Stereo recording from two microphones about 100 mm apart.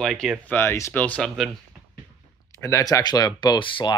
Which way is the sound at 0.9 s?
15° left (ahead or behind).